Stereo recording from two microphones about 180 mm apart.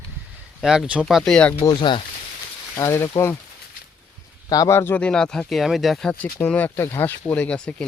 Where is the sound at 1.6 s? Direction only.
25° left (ahead or behind).